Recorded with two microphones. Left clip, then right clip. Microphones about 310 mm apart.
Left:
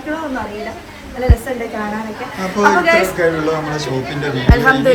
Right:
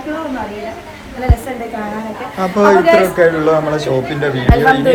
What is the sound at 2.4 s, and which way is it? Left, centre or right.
A woman's voice, centre.